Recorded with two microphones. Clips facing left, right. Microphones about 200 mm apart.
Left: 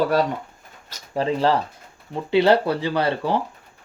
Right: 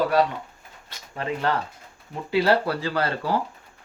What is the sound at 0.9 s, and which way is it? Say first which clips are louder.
Speech: left 7 dB; 30° left (ahead or behind).